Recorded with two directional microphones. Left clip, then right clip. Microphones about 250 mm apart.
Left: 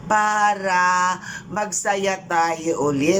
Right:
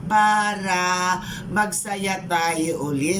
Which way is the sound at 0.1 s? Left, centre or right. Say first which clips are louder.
Even; centre.